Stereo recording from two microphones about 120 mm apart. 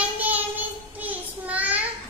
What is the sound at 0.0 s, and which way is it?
Child singing, 15° right (ahead or behind).